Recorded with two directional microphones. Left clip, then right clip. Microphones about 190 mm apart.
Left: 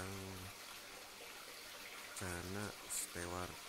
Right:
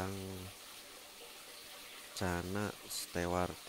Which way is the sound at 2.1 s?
30° right (ahead or behind).